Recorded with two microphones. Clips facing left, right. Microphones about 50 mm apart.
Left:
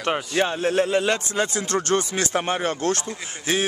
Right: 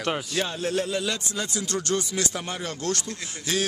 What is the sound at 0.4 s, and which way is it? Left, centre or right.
A man's voice, left.